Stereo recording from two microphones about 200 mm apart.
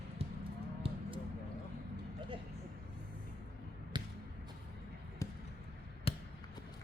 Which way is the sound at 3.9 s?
20° right (ahead or behind).